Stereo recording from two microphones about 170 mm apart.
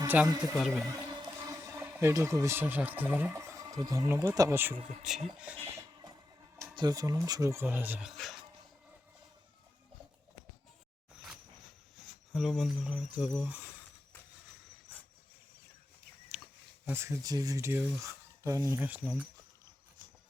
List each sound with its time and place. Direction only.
0.3 s speech: 25° right (ahead or behind)
0.6 s speech: centre (ahead or behind)
0.9 s music: 20° right (ahead or behind)
2.0 s speech: 15° right (ahead or behind)
5.4 s a sound: 10° right (ahead or behind)
6.7 s speech: 20° right (ahead or behind); by 8.4 s centre (ahead or behind)
12.3 s speech: centre (ahead or behind)
16.8 s speech: 15° right (ahead or behind)